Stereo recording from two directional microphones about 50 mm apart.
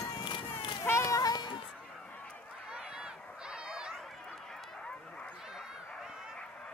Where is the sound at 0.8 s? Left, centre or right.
Left.